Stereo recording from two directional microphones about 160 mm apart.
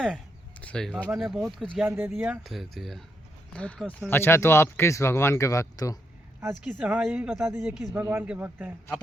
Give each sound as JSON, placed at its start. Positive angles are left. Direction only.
{"t": 0.6, "sound": "a sound", "side_deg": 5}
{"t": 1.0, "sound": "speech", "side_deg": 0}
{"t": 1.8, "sound": "speech", "side_deg": -15}
{"t": 2.4, "sound": "speech", "side_deg": 0}
{"t": 6.6, "sound": "speech", "side_deg": -10}
{"t": 7.9, "sound": "speech", "side_deg": -10}